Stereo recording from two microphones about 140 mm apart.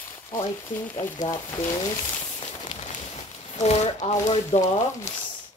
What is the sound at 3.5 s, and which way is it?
Speech, 50° left (ahead or behind).